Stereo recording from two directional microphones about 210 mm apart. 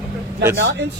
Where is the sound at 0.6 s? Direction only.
65° right (ahead or behind).